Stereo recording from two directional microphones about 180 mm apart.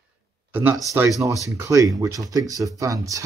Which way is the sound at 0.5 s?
10° right (ahead or behind).